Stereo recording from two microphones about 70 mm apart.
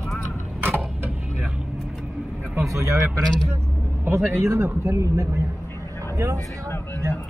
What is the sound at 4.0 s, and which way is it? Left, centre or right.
Speech, right.